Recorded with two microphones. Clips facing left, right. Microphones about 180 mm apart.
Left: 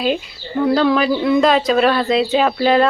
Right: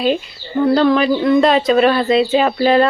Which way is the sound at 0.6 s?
Centre (ahead or behind).